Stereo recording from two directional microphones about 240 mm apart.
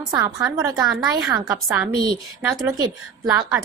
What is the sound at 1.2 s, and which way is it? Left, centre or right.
A woman's voice, centre.